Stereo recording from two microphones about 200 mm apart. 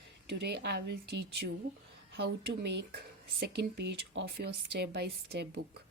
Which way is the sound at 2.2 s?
55° right (ahead or behind).